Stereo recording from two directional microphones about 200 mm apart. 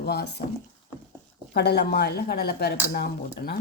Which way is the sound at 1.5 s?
55° left (ahead or behind).